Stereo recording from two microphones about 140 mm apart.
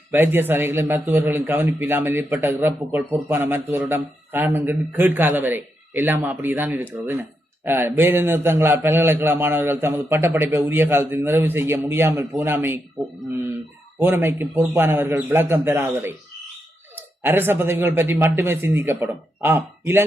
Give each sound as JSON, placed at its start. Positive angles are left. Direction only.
{"t": 0.1, "sound": "a man's voice", "side_deg": -15}
{"t": 14.0, "sound": "a man's voice", "side_deg": -15}